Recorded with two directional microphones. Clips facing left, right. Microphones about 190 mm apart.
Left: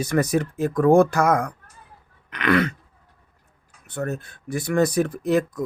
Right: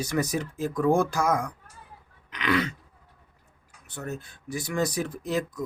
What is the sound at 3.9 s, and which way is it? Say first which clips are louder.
Speech: left 7 dB; 60° left (ahead or behind).